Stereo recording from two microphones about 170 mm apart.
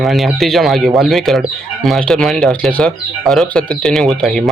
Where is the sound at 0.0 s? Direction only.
Centre (ahead or behind).